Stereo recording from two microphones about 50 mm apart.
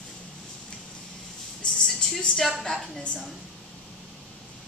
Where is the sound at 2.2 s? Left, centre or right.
Centre.